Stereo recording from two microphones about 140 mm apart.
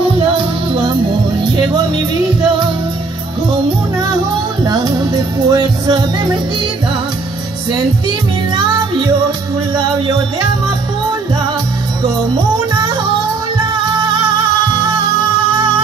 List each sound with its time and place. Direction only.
4.6 s music: 30° right (ahead or behind)
8.5 s music: 30° right (ahead or behind)
9.8 s speech: 30° right (ahead or behind)
12.5 s music: 30° right (ahead or behind)